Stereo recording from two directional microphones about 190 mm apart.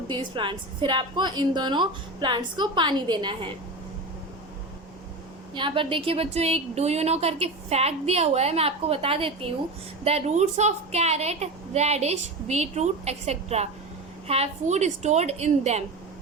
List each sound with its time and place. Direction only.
0.1 s a woman's voice: 25° right (ahead or behind)
5.5 s a woman's voice: 25° right (ahead or behind)